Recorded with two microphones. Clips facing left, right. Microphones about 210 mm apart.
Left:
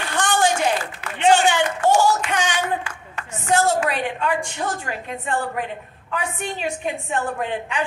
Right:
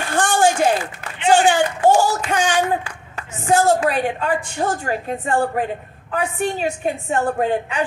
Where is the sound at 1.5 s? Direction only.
35° right (ahead or behind).